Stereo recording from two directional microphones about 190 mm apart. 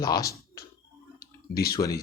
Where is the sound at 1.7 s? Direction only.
15° left (ahead or behind).